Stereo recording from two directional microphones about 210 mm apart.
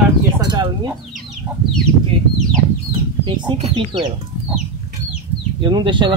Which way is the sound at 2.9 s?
20° right (ahead or behind).